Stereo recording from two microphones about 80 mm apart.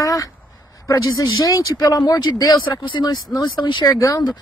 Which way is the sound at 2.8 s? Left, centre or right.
Left.